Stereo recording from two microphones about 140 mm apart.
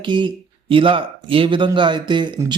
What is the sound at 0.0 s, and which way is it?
Speech, 35° right (ahead or behind).